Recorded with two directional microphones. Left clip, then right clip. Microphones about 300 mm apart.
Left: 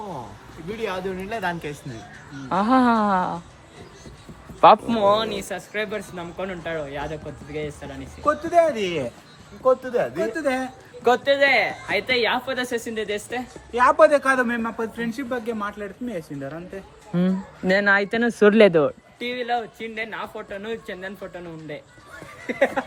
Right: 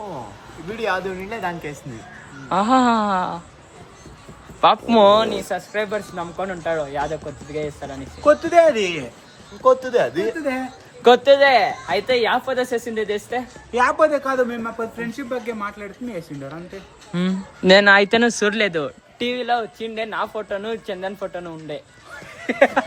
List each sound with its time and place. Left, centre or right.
0.8 s a woman's voice: centre
4.6 s a woman's voice: centre
5.0 s speech: right
5.5 s a woman's voice: centre
8.2 s speech: right
10.3 s a woman's voice: centre
11.0 s a woman's voice: right; by 13.8 s centre
14.0 s a man's voice: left
14.5 s a man's voice: centre
19.2 s speech: centre
22.4 s speech: right